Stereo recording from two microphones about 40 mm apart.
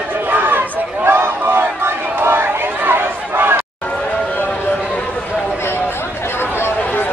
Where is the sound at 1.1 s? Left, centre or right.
Right.